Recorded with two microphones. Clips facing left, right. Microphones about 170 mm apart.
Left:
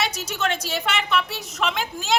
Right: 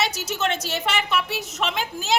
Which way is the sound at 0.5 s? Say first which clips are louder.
Even; centre (ahead or behind).